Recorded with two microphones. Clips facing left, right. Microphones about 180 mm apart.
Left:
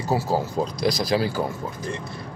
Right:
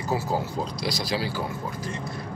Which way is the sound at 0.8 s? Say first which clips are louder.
Left 7 dB; 45° left (ahead or behind).